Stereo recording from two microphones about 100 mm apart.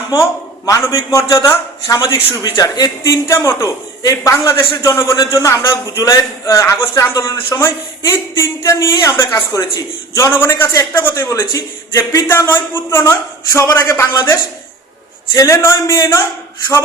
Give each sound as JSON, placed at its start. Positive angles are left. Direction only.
{"t": 0.1, "sound": "a man's voice", "side_deg": 35}
{"t": 2.3, "sound": "a man's voice", "side_deg": 40}
{"t": 10.2, "sound": "a man's voice", "side_deg": 25}
{"t": 15.4, "sound": "a man's voice", "side_deg": 35}